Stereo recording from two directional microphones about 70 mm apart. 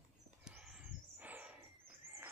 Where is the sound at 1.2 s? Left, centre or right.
Right.